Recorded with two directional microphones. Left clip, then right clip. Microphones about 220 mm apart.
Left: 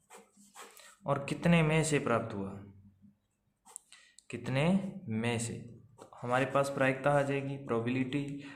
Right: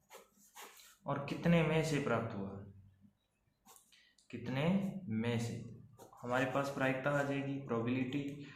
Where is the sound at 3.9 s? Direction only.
50° left (ahead or behind).